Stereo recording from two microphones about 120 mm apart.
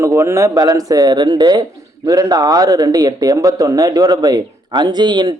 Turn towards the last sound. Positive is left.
turn(degrees=-40)  # may be behind; listen again after turning